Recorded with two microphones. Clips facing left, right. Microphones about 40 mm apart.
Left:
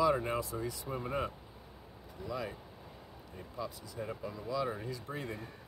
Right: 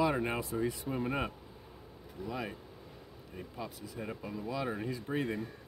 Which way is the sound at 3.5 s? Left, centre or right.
Right.